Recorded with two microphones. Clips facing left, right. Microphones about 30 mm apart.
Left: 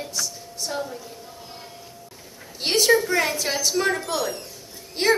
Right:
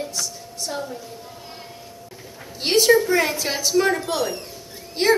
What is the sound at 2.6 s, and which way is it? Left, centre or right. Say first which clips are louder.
A woman's voice: right 3 dB; centre.